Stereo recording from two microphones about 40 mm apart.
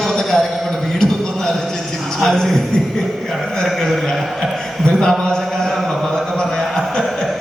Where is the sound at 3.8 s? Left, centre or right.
Centre.